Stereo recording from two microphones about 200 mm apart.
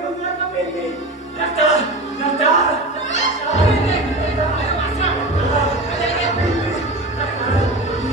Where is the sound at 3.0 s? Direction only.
35° left (ahead or behind).